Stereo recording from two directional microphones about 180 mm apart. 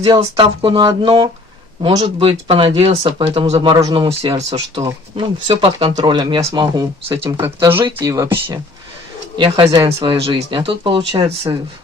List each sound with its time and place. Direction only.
0.0 s speech: 30° right (ahead or behind)
4.7 s speech: 20° right (ahead or behind)
9.4 s speech: 30° right (ahead or behind)